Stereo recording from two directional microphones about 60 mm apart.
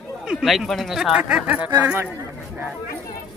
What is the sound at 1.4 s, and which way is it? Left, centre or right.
Speech, right.